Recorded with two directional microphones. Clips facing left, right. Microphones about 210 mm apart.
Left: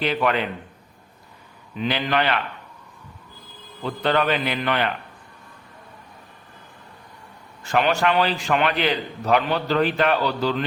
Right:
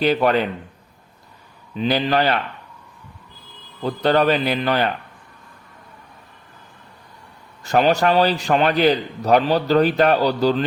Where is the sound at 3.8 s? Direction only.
40° right (ahead or behind).